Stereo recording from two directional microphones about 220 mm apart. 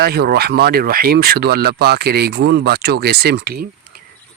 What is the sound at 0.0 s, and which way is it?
Speech, 45° right (ahead or behind).